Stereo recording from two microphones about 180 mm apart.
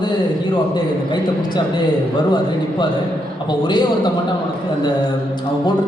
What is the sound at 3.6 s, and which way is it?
Speech, 25° left (ahead or behind).